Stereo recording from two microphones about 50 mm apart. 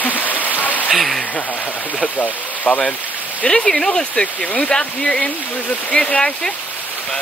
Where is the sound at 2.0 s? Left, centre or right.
Left.